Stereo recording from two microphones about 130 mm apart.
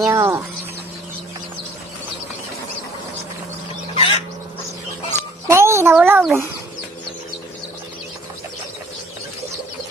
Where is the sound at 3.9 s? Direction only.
40° left (ahead or behind).